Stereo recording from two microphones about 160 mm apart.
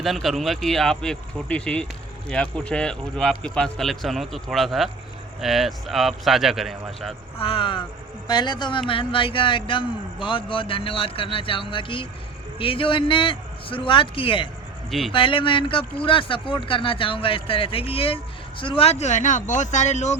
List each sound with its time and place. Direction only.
0.0 s a man's voice: centre (ahead or behind)
7.3 s speech: 35° left (ahead or behind)
14.8 s speech: centre (ahead or behind)
15.1 s speech: 35° left (ahead or behind)